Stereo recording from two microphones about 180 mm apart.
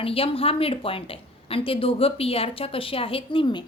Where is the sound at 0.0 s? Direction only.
30° left (ahead or behind).